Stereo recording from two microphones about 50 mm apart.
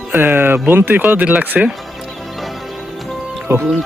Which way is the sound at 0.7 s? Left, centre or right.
Right.